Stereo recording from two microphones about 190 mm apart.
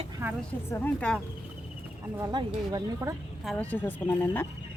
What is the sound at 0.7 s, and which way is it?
Speech, 10° left (ahead or behind).